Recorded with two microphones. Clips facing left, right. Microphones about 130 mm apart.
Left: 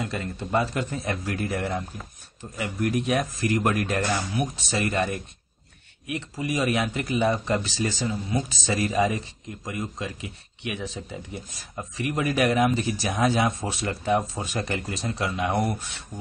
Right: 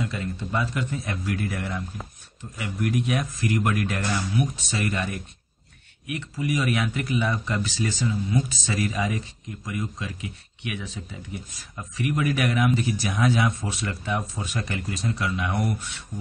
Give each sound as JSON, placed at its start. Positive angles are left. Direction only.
{"t": 0.0, "sound": "speech", "side_deg": 45}